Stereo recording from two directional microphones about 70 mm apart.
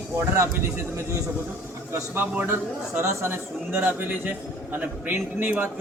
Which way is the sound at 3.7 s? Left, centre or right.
Right.